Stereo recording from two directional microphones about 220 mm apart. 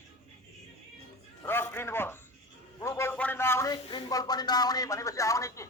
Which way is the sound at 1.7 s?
10° left (ahead or behind).